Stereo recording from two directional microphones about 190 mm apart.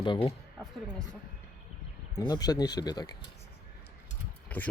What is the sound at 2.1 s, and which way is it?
Speech, 20° left (ahead or behind).